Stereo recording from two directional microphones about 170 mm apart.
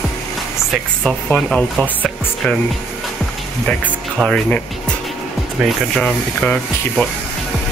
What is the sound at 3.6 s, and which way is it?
Speech, 5° left (ahead or behind).